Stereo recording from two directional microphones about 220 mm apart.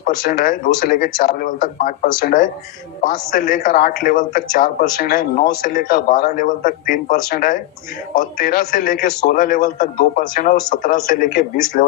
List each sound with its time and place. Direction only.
0.0 s a man's voice: 40° left (ahead or behind)